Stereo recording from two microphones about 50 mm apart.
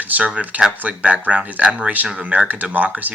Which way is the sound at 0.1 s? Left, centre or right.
Right.